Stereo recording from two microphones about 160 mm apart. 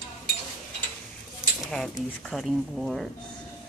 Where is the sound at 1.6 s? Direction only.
5° left (ahead or behind).